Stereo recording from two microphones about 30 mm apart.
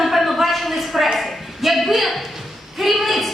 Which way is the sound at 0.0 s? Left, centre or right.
Centre.